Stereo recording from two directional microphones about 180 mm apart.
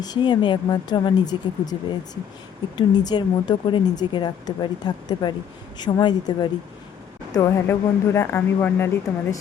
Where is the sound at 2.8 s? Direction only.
25° left (ahead or behind).